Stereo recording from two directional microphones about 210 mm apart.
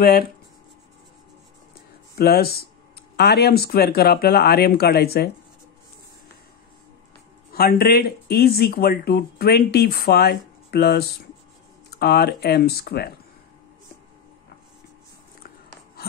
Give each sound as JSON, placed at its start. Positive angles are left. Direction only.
{"t": 2.1, "sound": "speech", "side_deg": 45}
{"t": 7.5, "sound": "speech", "side_deg": 45}
{"t": 16.0, "sound": "a sound", "side_deg": 45}